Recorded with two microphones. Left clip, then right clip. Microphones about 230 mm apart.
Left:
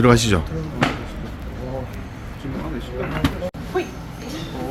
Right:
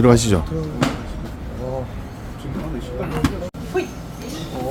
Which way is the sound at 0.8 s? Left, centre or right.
Right.